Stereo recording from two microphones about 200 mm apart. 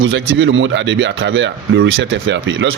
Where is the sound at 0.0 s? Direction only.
75° right (ahead or behind).